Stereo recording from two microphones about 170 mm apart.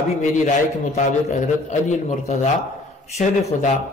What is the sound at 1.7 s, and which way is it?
Speech, 45° left (ahead or behind).